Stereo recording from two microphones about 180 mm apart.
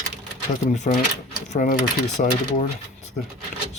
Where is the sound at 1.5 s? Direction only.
45° left (ahead or behind).